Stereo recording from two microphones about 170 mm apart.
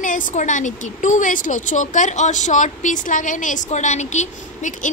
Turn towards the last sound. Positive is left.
turn(degrees=45)  # may be behind; listen again after turning